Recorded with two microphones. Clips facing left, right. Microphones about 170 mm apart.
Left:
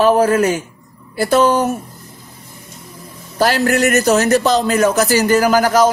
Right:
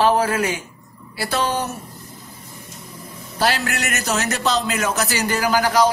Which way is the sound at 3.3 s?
40° left (ahead or behind).